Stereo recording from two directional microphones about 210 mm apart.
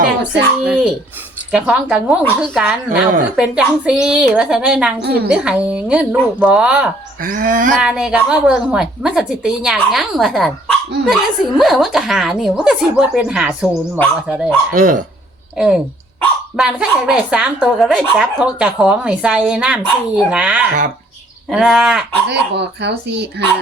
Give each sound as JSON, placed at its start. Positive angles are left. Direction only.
{"t": 0.6, "sound": "a woman's voice", "side_deg": -5}
{"t": 5.0, "sound": "a woman's voice", "side_deg": -50}
{"t": 5.3, "sound": "a woman's voice", "side_deg": -5}
{"t": 7.2, "sound": "a sound", "side_deg": -40}
{"t": 7.8, "sound": "a woman's voice", "side_deg": -5}
{"t": 14.7, "sound": "a sound", "side_deg": -40}
{"t": 15.5, "sound": "a woman's voice", "side_deg": -5}
{"t": 22.3, "sound": "speech", "side_deg": -55}